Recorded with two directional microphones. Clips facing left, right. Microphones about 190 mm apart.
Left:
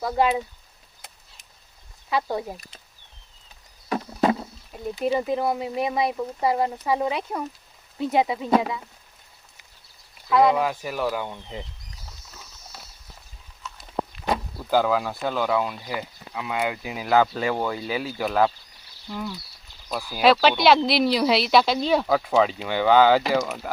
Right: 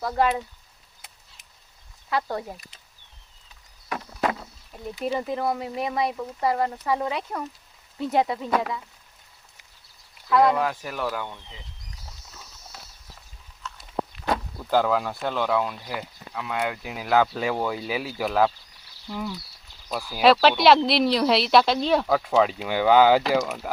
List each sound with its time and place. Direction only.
0.0 s speech: 10° left (ahead or behind)
2.0 s speech: 15° left (ahead or behind)
3.8 s a sound: 30° left (ahead or behind)
5.0 s speech: 15° left (ahead or behind)
8.4 s speech: 20° left (ahead or behind)
10.2 s speech: 5° left (ahead or behind)
14.3 s speech: 5° left (ahead or behind)
19.9 s speech: centre (ahead or behind)